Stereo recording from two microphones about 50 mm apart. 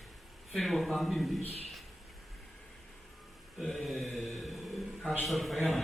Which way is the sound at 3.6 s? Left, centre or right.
Centre.